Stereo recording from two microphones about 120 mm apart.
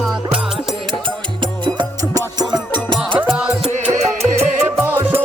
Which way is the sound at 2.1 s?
35° right (ahead or behind).